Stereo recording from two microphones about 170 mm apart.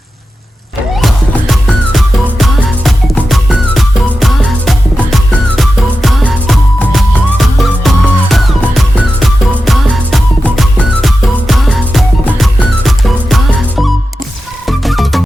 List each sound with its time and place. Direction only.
1.0 s music: centre (ahead or behind)